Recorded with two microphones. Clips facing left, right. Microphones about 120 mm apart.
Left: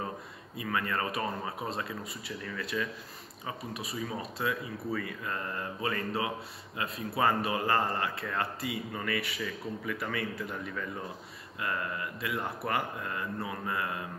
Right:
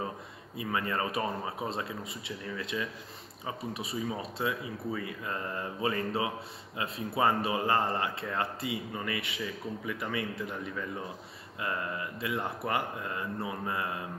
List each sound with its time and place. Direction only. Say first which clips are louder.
0.6 s speech: right 1 dB; 25° right (ahead or behind)
11.6 s speech: even; 25° right (ahead or behind)